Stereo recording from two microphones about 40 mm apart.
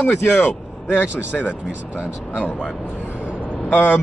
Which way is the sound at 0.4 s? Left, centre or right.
Left.